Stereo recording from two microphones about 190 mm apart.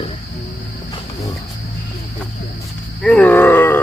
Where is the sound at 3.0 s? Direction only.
5° left (ahead or behind).